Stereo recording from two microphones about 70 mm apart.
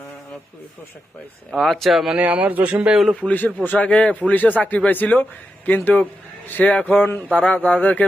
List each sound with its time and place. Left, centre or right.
1.5 s speech: centre
2.1 s a man's voice: right
3.2 s a man's voice: left